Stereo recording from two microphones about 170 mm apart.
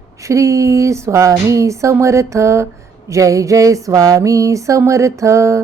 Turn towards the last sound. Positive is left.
turn(degrees=-15)  # may be behind; listen again after turning